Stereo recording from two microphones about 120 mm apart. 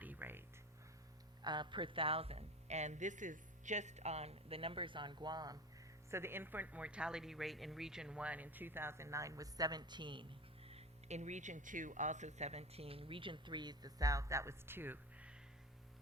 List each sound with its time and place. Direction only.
0.0 s a sound: 15° right (ahead or behind)
1.4 s speech: 40° right (ahead or behind)
6.1 s speech: 20° right (ahead or behind)